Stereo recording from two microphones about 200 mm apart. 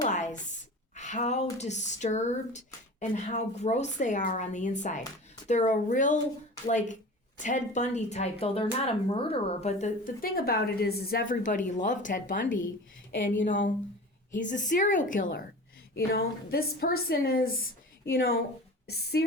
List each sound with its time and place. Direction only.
0.0 s a sound: 35° left (ahead or behind)
0.9 s a woman's voice: 35° left (ahead or behind)
14.3 s a woman's voice: 40° left (ahead or behind)